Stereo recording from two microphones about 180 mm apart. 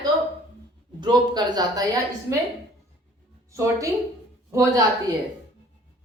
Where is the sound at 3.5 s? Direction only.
15° right (ahead or behind).